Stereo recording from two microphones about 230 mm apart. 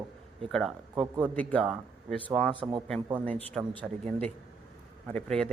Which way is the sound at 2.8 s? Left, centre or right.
Centre.